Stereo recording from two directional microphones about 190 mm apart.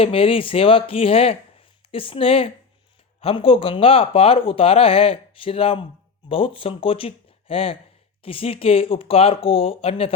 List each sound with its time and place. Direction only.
0.0 s speech: 30° left (ahead or behind)